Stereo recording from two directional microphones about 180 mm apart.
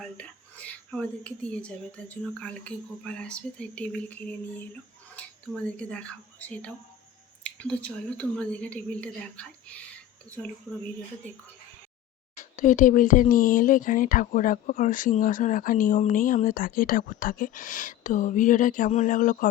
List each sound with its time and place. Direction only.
0.0 s speech: 5° left (ahead or behind)
5.2 s a sound: 5° left (ahead or behind)
5.7 s speech: 5° left (ahead or behind)
12.4 s speech: 45° left (ahead or behind)